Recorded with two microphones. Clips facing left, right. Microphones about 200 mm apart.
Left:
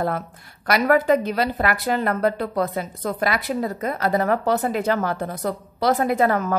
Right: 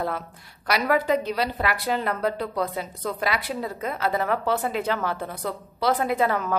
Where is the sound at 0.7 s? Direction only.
50° left (ahead or behind).